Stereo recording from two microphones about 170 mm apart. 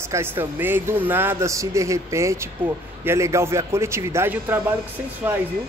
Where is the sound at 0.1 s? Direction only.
15° right (ahead or behind).